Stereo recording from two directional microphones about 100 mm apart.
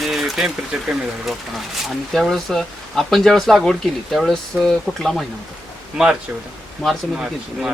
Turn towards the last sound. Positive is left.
turn(degrees=-5)  # may be behind; listen again after turning